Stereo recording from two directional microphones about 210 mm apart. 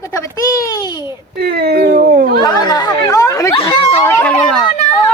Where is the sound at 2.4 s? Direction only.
20° left (ahead or behind).